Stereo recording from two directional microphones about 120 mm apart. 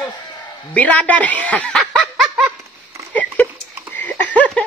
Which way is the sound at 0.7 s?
10° left (ahead or behind).